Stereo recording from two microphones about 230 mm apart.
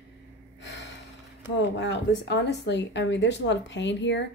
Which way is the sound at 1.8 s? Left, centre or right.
Left.